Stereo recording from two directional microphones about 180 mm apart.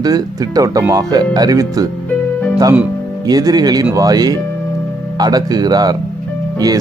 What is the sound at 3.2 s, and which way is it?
Speech, 20° right (ahead or behind).